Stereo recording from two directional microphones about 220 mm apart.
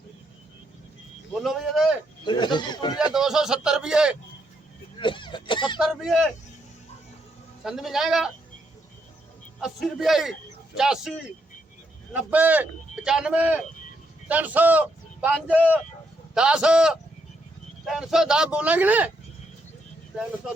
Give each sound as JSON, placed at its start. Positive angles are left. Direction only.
{"t": 1.3, "sound": "speech", "side_deg": 0}
{"t": 2.2, "sound": "a man's voice", "side_deg": 20}
{"t": 3.1, "sound": "speech", "side_deg": 0}
{"t": 4.9, "sound": "speech", "side_deg": 20}
{"t": 5.8, "sound": "speech", "side_deg": 0}
{"t": 7.6, "sound": "speech", "side_deg": 0}
{"t": 9.6, "sound": "speech", "side_deg": 0}
{"t": 12.1, "sound": "speech", "side_deg": -5}